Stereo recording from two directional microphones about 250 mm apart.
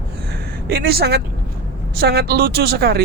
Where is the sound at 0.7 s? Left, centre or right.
Right.